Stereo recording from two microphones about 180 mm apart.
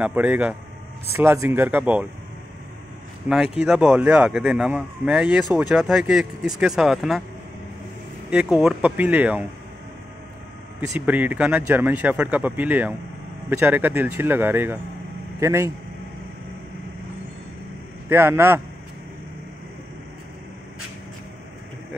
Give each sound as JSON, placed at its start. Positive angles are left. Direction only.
{"t": 0.0, "sound": "speech", "side_deg": -10}
{"t": 3.5, "sound": "speech", "side_deg": -5}
{"t": 8.3, "sound": "speech", "side_deg": -5}
{"t": 11.0, "sound": "speech", "side_deg": -10}
{"t": 18.0, "sound": "speech", "side_deg": -15}